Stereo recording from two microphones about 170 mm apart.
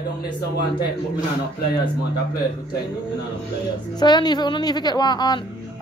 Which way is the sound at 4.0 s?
25° left (ahead or behind).